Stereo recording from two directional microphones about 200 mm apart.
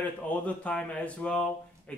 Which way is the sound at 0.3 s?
5° left (ahead or behind).